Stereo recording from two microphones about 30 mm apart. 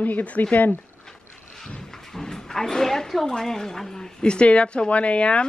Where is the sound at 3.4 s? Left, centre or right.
Centre.